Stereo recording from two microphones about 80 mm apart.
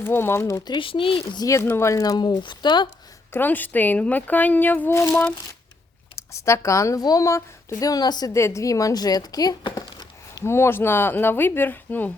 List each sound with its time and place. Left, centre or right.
0.0 s speech: left
0.7 s speech: left
1.6 s speech: left
2.0 s speech: left
3.3 s speech: left
6.1 s speech: left
8.3 s speech: left
9.7 s a sound: left
10.4 s speech: left